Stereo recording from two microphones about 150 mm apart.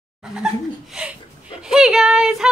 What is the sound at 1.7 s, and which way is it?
Speech, 5° right (ahead or behind).